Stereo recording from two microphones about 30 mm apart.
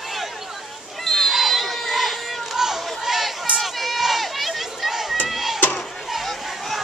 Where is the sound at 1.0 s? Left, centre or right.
Centre.